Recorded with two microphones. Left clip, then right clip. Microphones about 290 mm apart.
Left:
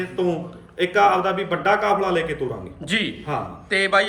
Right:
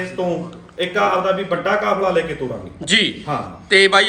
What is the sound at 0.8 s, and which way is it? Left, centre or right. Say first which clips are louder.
A man's voice: even; centre.